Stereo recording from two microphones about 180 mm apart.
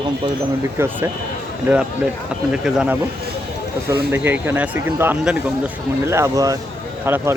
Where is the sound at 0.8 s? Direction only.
15° right (ahead or behind).